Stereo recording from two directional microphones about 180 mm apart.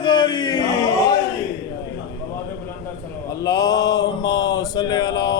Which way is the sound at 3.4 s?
20° left (ahead or behind).